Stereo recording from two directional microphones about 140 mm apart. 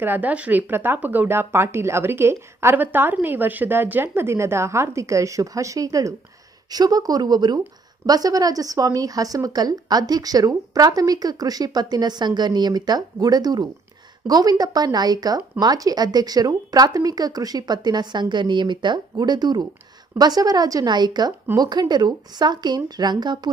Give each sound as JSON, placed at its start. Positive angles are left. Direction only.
{"t": 0.0, "sound": "a woman's voice", "side_deg": -10}